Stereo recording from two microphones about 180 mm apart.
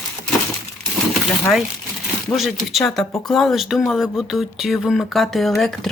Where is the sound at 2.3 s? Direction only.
Centre (ahead or behind).